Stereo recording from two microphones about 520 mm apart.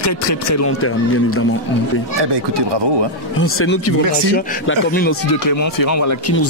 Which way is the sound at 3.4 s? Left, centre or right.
Left.